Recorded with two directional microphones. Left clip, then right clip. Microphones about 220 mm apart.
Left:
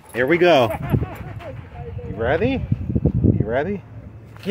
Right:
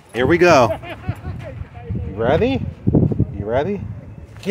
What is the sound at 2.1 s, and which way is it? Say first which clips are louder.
Speech: right 3 dB; 20° right (ahead or behind).